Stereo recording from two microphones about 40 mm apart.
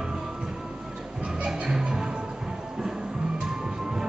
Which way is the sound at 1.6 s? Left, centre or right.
Centre.